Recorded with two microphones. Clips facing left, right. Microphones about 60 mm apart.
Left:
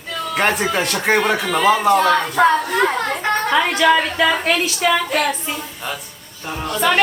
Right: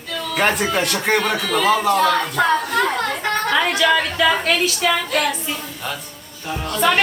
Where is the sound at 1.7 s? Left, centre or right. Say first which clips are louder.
Left 3 dB; centre.